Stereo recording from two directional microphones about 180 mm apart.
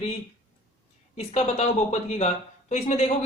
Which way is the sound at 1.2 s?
35° left (ahead or behind).